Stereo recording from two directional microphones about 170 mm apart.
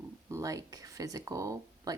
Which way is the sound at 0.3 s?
20° right (ahead or behind).